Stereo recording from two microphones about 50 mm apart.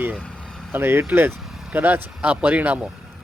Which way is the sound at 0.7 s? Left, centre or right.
Right.